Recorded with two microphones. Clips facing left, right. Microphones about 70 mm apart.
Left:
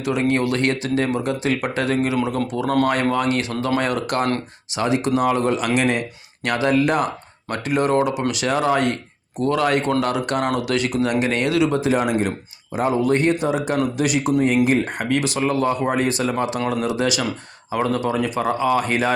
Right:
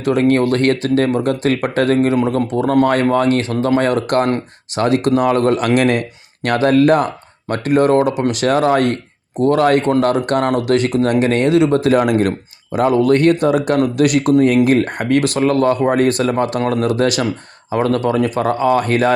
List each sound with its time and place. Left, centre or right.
0.0 s speech: right
2.4 s speech: right
4.7 s speech: right
11.7 s speech: right